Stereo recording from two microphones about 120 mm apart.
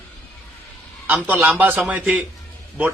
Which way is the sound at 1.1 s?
15° right (ahead or behind).